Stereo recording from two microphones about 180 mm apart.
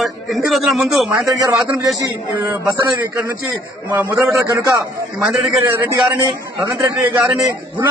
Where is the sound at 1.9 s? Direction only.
20° right (ahead or behind).